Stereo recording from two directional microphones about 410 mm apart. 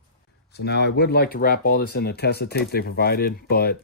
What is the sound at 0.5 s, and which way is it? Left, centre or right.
Speech, left.